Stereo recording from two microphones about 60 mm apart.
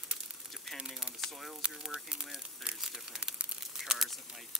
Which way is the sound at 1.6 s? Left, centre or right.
Centre.